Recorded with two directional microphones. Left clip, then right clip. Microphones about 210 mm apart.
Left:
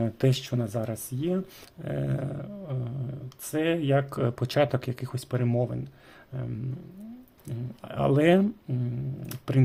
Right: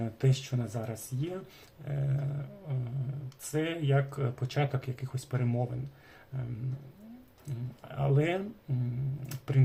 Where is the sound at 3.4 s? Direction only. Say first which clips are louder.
Left 6 dB; 45° left (ahead or behind).